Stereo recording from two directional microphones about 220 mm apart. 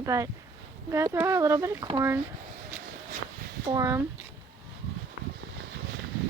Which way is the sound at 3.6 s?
15° right (ahead or behind).